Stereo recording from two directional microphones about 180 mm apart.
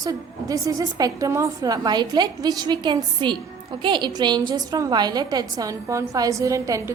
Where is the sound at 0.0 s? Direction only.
20° right (ahead or behind).